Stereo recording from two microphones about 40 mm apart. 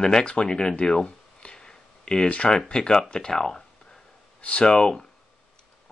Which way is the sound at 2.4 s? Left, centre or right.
Centre.